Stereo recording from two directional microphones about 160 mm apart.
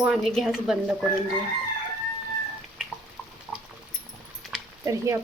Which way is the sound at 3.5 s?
5° right (ahead or behind).